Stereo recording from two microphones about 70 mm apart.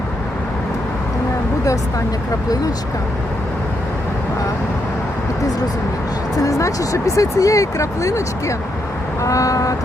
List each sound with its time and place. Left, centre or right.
6.3 s speech: left